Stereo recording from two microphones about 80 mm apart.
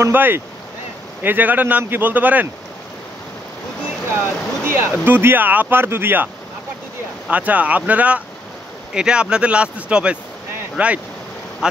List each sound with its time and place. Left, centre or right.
0.0 s speech: right
4.2 s speech: right